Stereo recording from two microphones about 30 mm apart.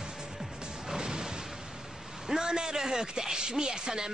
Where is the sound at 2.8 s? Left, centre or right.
Centre.